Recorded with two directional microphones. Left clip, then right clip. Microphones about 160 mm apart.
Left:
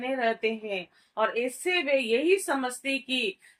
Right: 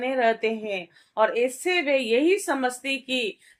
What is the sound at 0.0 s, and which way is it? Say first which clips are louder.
A woman's voice: right 5 dB; 40° right (ahead or behind).